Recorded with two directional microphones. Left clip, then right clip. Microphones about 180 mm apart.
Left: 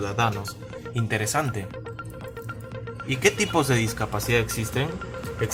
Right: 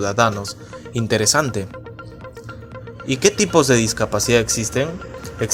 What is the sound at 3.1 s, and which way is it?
Speech, 30° right (ahead or behind).